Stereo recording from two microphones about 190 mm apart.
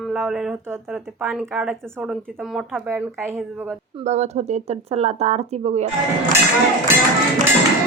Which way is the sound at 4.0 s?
35° right (ahead or behind).